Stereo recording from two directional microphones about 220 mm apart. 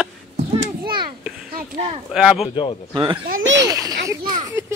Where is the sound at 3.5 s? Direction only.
15° right (ahead or behind).